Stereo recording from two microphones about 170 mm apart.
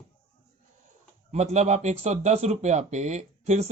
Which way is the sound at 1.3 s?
40° right (ahead or behind).